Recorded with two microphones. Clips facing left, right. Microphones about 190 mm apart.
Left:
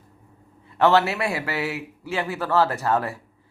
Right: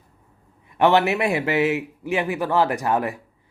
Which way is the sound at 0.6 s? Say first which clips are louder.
Right 1 dB; 15° right (ahead or behind).